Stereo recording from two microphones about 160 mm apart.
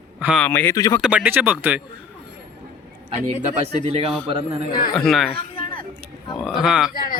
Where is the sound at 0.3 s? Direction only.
10° left (ahead or behind).